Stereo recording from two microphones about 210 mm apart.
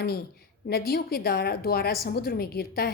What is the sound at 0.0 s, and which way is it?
A woman's voice, 45° left (ahead or behind).